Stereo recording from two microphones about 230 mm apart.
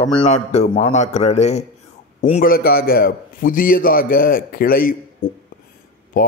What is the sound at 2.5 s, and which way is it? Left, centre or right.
Speech, left.